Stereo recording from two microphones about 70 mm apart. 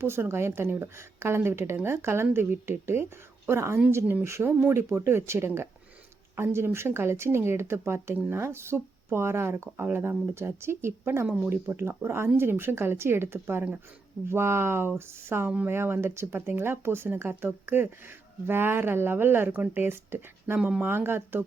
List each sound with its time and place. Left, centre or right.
0.0 s speech: right
20.6 s speech: centre
20.8 s speech: right